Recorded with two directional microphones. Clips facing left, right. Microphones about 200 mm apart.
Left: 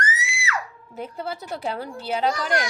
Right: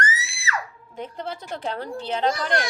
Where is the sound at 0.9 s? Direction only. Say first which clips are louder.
Left 1 dB; 10° left (ahead or behind).